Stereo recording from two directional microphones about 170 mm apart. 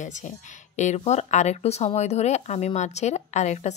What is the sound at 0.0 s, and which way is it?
Speech, 45° left (ahead or behind).